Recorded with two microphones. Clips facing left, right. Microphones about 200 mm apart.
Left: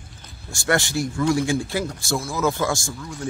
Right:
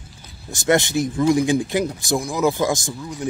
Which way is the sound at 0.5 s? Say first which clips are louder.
Right 4 dB; 20° right (ahead or behind).